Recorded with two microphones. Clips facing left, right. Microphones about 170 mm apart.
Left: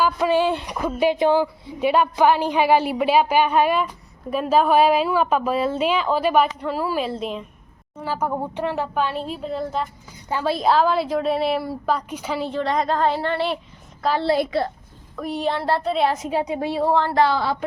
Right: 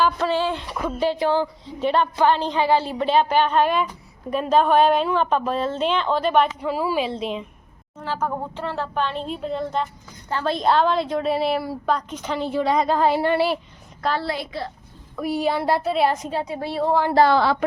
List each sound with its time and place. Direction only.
0.0 s a woman's voice: 10° left (ahead or behind)
12.5 s a woman's voice: 5° right (ahead or behind)
16.3 s a woman's voice: 15° left (ahead or behind)
17.3 s a woman's voice: 70° right (ahead or behind)